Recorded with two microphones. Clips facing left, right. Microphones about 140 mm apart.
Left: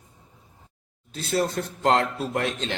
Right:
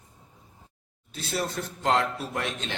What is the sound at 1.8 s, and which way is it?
Speech, 35° left (ahead or behind).